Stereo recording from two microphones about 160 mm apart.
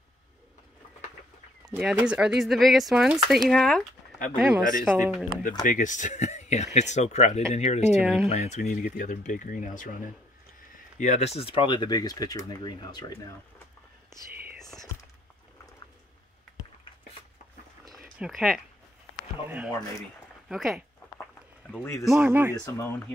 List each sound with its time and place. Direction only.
1.8 s speech: 5° right (ahead or behind)
5.6 s speech: 50° left (ahead or behind)
8.0 s speech: 5° right (ahead or behind)
8.3 s speech: 45° left (ahead or behind); by 13.1 s 25° left (ahead or behind)
17.9 s a sound: centre (ahead or behind)
20.4 s speech: centre (ahead or behind)
22.0 s speech: centre (ahead or behind)
22.3 s speech: 15° right (ahead or behind)